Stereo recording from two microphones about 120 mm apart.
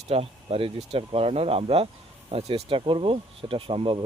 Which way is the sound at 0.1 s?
55° right (ahead or behind).